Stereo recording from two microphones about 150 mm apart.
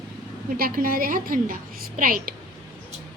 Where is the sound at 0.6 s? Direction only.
70° right (ahead or behind).